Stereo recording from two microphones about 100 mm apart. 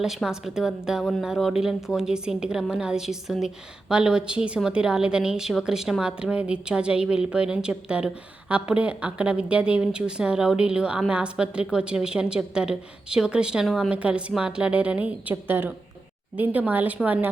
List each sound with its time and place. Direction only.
0.0 s a woman's voice: 5° right (ahead or behind)